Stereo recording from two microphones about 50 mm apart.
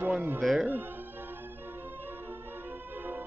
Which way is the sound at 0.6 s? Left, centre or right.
Right.